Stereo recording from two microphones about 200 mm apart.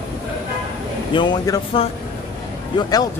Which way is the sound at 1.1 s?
20° left (ahead or behind).